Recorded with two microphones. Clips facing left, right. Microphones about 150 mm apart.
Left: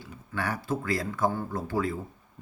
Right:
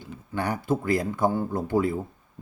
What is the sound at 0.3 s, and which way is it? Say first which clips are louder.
Speech: right 4 dB; 20° right (ahead or behind).